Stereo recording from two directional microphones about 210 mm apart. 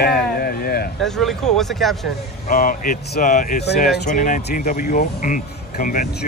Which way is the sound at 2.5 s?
40° left (ahead or behind).